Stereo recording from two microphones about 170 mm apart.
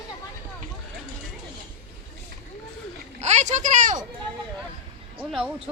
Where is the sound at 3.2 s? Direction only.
45° right (ahead or behind).